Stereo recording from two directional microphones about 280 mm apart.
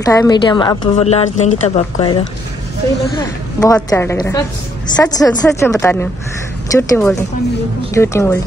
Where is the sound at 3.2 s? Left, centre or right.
Centre.